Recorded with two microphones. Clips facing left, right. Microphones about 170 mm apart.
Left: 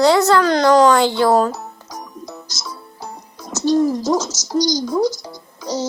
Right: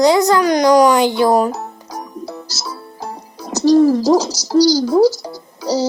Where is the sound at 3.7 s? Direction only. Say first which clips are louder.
Right 5 dB; 80° right.